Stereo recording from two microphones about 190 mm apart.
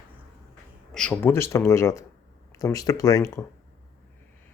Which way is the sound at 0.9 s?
5° left (ahead or behind).